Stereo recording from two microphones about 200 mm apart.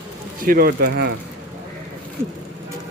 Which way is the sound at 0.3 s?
45° right (ahead or behind).